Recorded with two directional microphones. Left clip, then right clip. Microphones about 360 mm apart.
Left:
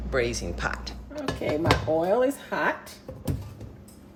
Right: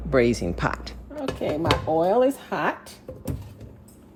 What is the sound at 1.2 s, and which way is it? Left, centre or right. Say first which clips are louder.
Dishes: right 1 dB; centre.